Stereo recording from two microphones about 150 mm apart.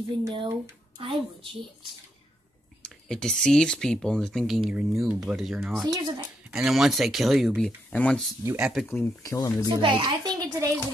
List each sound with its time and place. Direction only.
0.2 s a child's voice: 30° right (ahead or behind)
2.8 s speech: 5° left (ahead or behind)
5.9 s a child's voice: 25° right (ahead or behind)
6.5 s speech: centre (ahead or behind)
8.5 s speech: 5° right (ahead or behind)
8.9 s speech: 15° left (ahead or behind)
9.7 s a child's voice: 35° right (ahead or behind)